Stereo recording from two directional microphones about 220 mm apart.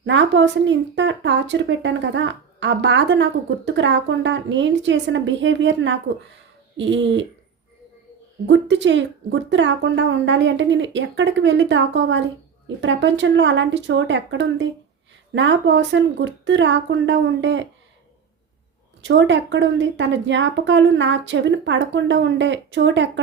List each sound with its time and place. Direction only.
0.0 s a woman's voice: 55° right (ahead or behind)
8.4 s a woman's voice: 55° right (ahead or behind)
19.0 s a woman's voice: 55° right (ahead or behind)